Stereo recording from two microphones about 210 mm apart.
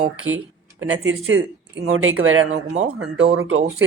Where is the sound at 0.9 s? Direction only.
70° right (ahead or behind).